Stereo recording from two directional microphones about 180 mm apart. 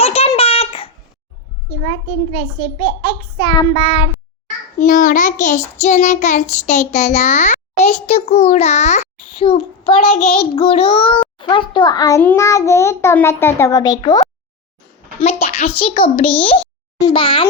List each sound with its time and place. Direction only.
0.0 s baby laughter: 35° left (ahead or behind)
1.7 s a child's voice: 30° left (ahead or behind)
4.8 s child singing: 45° left (ahead or behind)
11.3 s a child's voice: 25° left (ahead or behind)
15.2 s a woman's voice: 35° left (ahead or behind)